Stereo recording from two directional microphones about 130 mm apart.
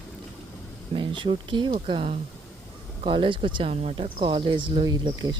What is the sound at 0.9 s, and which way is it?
Speech, 40° right (ahead or behind).